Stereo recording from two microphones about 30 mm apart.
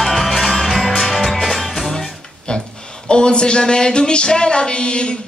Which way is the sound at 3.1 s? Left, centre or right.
Left.